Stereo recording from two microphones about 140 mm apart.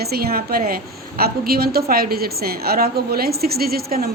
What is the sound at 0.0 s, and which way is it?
A woman's voice, 90° right.